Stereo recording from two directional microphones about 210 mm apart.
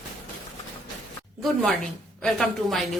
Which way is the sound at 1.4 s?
Centre (ahead or behind).